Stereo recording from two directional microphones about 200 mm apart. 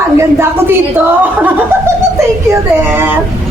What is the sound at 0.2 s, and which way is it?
Speech, 10° right (ahead or behind).